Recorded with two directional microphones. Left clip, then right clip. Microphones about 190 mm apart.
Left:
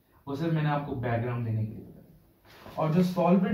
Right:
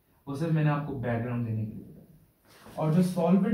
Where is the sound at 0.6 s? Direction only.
Centre (ahead or behind).